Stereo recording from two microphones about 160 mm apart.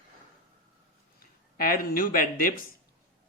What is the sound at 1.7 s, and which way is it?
Speech, 60° left (ahead or behind).